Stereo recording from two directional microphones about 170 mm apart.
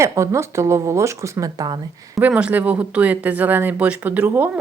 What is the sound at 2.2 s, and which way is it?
Speech, 5° right (ahead or behind).